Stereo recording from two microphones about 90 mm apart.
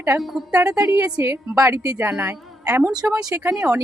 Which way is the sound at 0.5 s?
35° right (ahead or behind).